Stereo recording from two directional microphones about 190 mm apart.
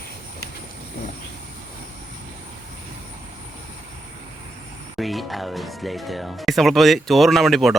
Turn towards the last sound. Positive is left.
turn(degrees=0)  # may be behind; listen again after turning